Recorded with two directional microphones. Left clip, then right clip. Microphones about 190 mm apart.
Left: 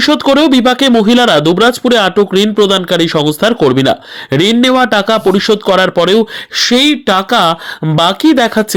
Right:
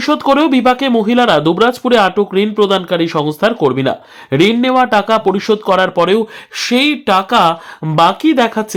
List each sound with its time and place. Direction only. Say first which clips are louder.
0.0 s speech: left 3 dB; 20° left (ahead or behind)